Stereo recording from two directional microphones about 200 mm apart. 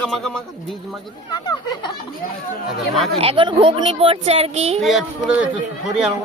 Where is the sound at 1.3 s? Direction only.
20° left (ahead or behind).